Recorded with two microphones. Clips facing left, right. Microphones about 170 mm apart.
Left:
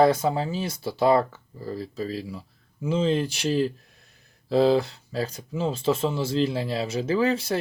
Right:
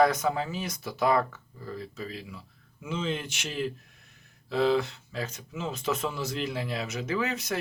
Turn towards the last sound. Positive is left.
turn(degrees=30)  # may be behind; listen again after turning